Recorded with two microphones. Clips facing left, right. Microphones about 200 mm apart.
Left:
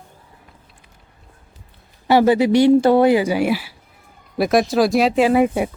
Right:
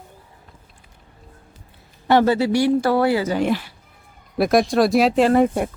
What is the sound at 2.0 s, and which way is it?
Speech, 10° left (ahead or behind).